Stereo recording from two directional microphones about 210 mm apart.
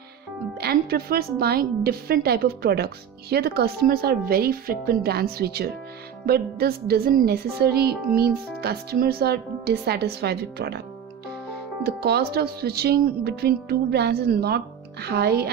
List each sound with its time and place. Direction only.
0.6 s a woman's voice: 45° right (ahead or behind)
11.8 s a woman's voice: 50° right (ahead or behind)